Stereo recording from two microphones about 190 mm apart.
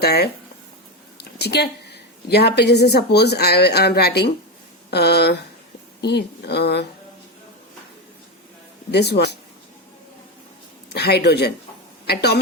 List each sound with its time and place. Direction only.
0.0 s a woman's voice: 55° left (ahead or behind)
8.9 s a woman's voice: 60° left (ahead or behind)
10.9 s a woman's voice: 60° left (ahead or behind)